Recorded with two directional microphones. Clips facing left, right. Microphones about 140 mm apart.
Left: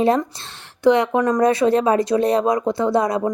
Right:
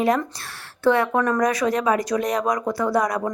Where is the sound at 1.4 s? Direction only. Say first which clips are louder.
Left 5 dB; 30° left (ahead or behind).